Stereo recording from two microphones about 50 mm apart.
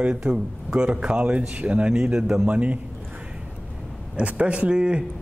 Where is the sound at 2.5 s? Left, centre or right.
Right.